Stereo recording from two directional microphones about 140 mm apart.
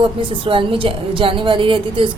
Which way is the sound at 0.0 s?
40° right (ahead or behind).